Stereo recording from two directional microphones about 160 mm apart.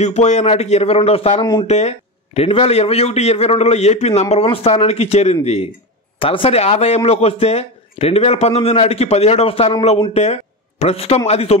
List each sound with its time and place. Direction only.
0.0 s a man's voice: 45° left (ahead or behind)